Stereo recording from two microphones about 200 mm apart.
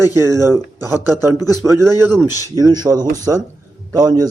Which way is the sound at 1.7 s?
15° right (ahead or behind).